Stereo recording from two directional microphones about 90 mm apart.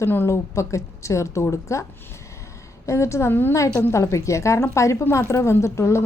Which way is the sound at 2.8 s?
35° left (ahead or behind).